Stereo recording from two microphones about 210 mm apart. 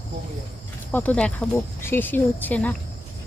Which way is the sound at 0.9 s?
5° left (ahead or behind).